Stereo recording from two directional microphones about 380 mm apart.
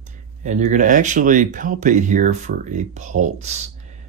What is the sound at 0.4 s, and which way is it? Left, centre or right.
Speech, centre.